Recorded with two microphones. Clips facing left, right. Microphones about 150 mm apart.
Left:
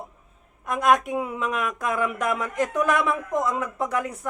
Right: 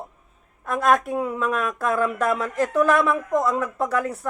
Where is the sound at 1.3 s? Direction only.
45° right (ahead or behind).